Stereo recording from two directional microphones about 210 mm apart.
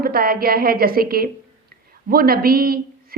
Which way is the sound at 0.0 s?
45° right (ahead or behind).